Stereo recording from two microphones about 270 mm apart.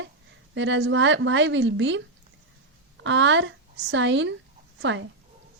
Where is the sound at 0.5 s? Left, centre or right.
Right.